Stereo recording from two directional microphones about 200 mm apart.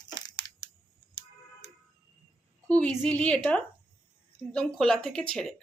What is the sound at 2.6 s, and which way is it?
A woman's voice, 5° left (ahead or behind).